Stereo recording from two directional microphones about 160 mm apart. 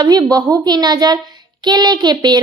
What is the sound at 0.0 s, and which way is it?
A child's voice, 25° right (ahead or behind).